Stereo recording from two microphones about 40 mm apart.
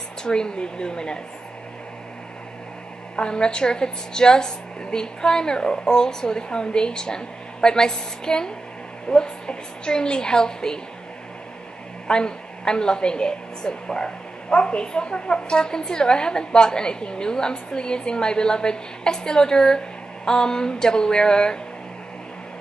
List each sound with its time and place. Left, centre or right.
0.2 s a woman's voice: centre
3.2 s a woman's voice: left
12.1 s a woman's voice: left